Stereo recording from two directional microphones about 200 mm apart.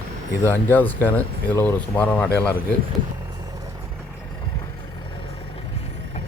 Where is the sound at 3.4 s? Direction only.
20° right (ahead or behind).